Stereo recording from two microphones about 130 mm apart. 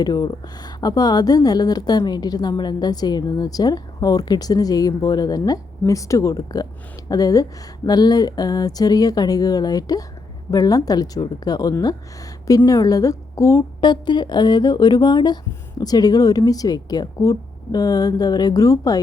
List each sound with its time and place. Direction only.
0.0 s a woman's voice: 30° left (ahead or behind)